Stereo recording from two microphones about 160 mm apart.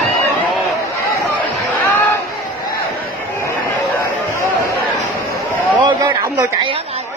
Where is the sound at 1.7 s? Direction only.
15° left (ahead or behind).